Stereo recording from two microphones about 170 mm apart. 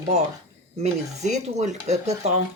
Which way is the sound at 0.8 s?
40° right (ahead or behind).